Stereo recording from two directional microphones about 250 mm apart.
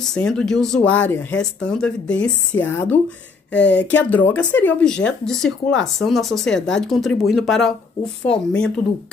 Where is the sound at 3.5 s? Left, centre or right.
Left.